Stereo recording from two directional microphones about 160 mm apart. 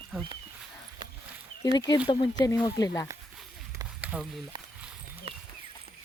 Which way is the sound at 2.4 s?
20° left (ahead or behind).